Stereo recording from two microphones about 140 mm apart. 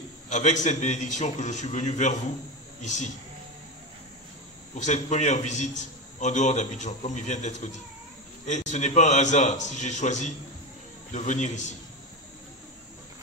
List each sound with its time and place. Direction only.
0.3 s a man's voice: 60° left (ahead or behind)
4.7 s a man's voice: 55° left (ahead or behind)